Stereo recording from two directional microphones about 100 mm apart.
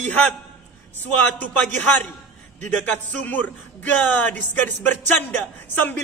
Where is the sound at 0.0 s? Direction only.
15° left (ahead or behind).